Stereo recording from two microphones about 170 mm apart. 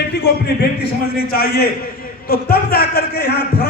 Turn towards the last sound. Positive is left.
turn(degrees=70)  # may be behind; listen again after turning